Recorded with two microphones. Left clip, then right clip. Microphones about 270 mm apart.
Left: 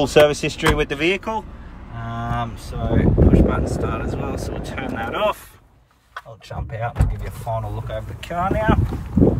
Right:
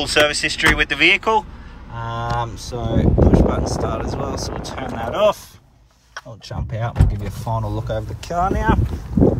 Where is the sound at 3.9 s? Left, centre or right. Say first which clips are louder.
Right 2 dB; centre.